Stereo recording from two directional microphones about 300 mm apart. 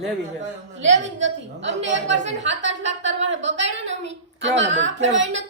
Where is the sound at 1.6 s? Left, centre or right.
Right.